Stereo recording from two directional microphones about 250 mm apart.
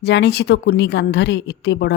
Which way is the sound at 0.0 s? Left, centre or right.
Left.